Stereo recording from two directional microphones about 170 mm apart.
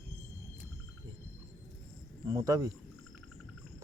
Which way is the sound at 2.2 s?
20° right (ahead or behind).